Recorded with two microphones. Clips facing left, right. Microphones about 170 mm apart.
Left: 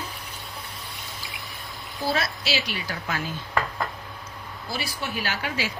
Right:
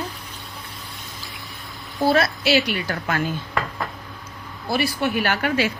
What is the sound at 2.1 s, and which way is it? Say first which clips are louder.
Speech: right 8 dB; 60° right (ahead or behind).